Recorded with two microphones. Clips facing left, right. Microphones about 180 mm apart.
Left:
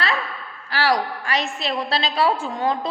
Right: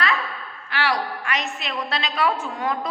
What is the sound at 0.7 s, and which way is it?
A woman's voice, 35° left (ahead or behind).